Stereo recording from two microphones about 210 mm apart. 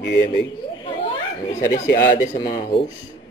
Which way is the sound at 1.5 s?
35° left (ahead or behind).